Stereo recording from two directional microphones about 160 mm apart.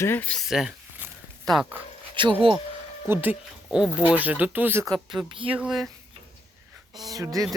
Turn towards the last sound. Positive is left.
turn(degrees=-25)  # may be behind; listen again after turning